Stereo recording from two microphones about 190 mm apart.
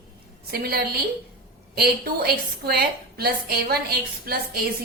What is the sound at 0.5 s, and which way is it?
A woman's voice, 55° right (ahead or behind).